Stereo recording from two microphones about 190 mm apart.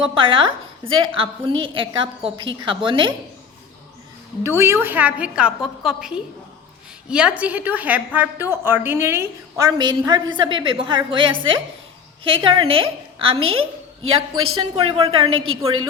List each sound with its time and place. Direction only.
0.0 s a woman's voice: 25° right (ahead or behind)
4.4 s a woman's voice: 15° right (ahead or behind)